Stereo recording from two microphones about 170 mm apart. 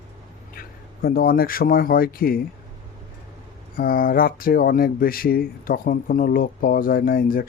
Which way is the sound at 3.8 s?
55° left (ahead or behind).